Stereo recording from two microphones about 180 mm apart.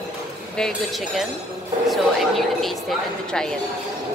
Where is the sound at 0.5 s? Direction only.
5° left (ahead or behind).